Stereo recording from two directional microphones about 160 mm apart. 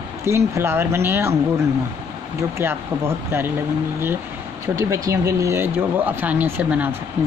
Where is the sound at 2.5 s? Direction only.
15° right (ahead or behind).